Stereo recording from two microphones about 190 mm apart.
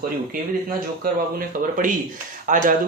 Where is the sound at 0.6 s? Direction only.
50° right (ahead or behind).